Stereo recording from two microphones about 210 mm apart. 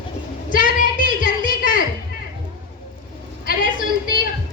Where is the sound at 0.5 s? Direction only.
40° left (ahead or behind).